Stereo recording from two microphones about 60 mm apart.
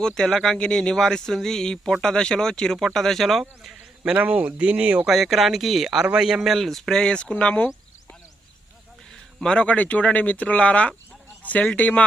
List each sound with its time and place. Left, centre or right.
0.0 s speech: centre
3.6 s a sound: centre
4.1 s speech: right
5.0 s speech: centre
9.1 s a sound: centre
9.6 s speech: left